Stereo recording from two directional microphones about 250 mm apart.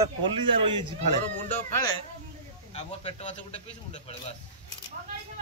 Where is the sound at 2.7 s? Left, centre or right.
Left.